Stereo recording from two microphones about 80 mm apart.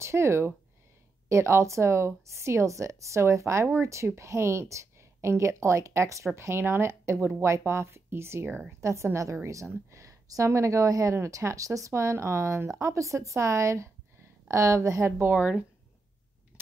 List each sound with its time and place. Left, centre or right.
0.0 s a woman's voice: right
15.3 s speech: centre